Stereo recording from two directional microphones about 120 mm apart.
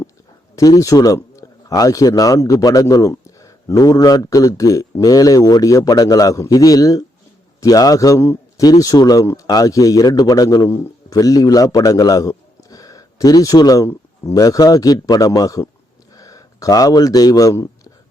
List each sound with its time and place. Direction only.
0.5 s a man's voice: 30° left (ahead or behind)